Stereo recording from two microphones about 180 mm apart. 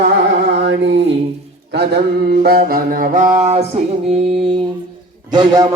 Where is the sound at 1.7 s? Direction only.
65° right (ahead or behind); by 4.2 s 35° right (ahead or behind).